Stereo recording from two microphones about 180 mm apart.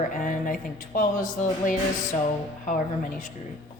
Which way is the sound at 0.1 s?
50° left (ahead or behind).